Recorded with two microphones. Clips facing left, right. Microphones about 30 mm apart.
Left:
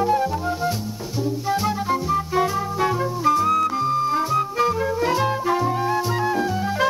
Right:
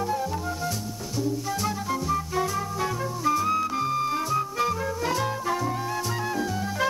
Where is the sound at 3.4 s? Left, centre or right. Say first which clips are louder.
Left 6 dB; left.